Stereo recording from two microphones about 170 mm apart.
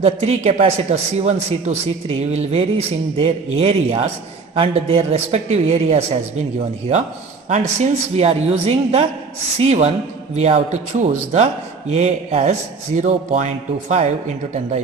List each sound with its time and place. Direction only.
0.0 s a man's voice: 40° right (ahead or behind)
8.1 s a man's voice: 35° right (ahead or behind)